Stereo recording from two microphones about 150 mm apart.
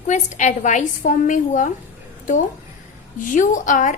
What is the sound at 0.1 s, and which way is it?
A woman's voice, 50° left (ahead or behind).